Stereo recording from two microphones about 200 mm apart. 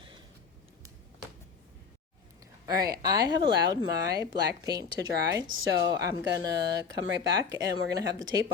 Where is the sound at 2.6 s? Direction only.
20° right (ahead or behind).